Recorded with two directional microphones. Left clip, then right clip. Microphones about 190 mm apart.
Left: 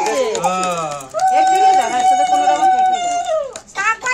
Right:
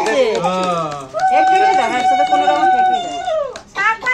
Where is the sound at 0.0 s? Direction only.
Centre (ahead or behind).